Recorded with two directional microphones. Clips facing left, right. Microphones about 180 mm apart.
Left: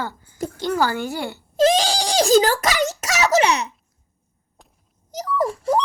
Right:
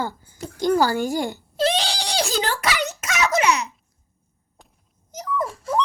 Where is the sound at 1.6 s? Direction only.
45° left (ahead or behind).